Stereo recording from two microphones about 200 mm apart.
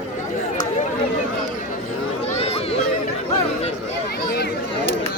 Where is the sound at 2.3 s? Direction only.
30° left (ahead or behind).